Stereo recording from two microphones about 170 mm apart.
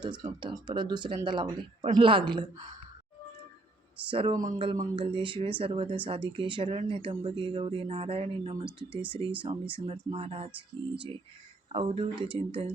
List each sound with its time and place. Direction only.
0.0 s speech: 25° right (ahead or behind)
4.1 s speech: 30° right (ahead or behind)
11.7 s speech: 30° right (ahead or behind)